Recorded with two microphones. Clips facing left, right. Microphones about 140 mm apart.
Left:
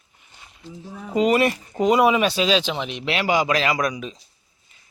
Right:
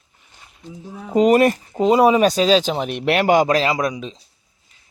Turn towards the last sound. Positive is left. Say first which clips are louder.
# right 2 dB
turn(degrees=-25)  # may be behind; listen again after turning